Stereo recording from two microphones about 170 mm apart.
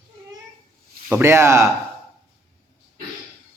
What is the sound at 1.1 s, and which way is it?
Speech, 15° right (ahead or behind).